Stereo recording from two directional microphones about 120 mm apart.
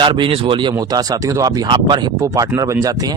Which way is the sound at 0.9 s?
30° right (ahead or behind).